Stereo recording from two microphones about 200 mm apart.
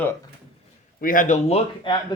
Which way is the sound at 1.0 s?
40° left (ahead or behind).